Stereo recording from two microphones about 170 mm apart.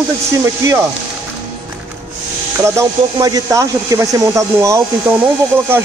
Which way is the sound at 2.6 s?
15° right (ahead or behind).